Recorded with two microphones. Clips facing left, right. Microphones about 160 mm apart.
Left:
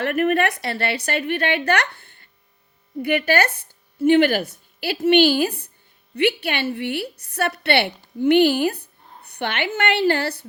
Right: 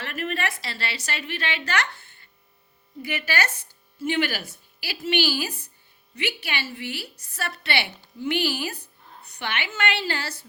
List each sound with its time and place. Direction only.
0.0 s a woman's voice: 60° left (ahead or behind)